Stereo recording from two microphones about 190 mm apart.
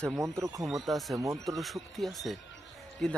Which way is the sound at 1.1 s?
15° right (ahead or behind).